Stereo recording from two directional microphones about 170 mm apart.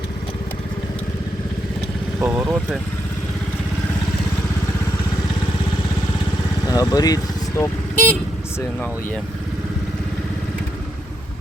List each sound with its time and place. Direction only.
2.2 s speech: 5° right (ahead or behind)
6.7 s speech: 20° left (ahead or behind)